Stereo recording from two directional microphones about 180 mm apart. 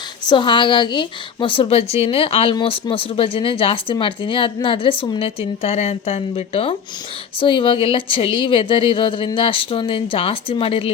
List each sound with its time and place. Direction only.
0.3 s a woman's voice: 25° left (ahead or behind)